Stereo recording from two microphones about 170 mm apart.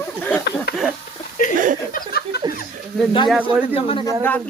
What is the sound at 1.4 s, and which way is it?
Speech, 50° left (ahead or behind).